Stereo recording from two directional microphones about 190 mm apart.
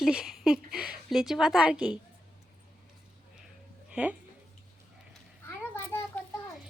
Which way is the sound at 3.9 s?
5° right (ahead or behind).